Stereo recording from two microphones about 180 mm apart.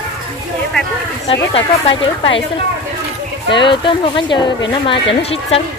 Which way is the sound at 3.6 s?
25° left (ahead or behind).